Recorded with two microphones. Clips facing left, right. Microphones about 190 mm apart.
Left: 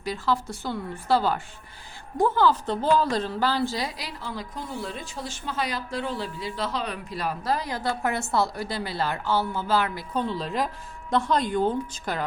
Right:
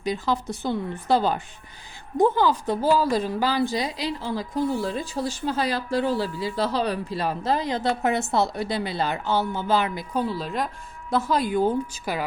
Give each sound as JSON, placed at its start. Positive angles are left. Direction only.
{"t": 0.0, "sound": "a woman's voice", "side_deg": -20}
{"t": 10.2, "sound": "a woman's voice", "side_deg": -5}